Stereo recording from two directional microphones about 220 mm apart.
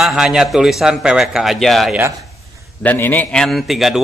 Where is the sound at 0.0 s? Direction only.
5° right (ahead or behind).